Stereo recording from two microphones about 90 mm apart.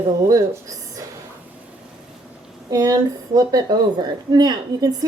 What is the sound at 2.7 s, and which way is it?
A woman's voice, 45° right (ahead or behind).